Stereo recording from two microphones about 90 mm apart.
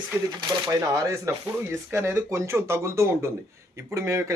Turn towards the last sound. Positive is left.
turn(degrees=-35)  # may be behind; listen again after turning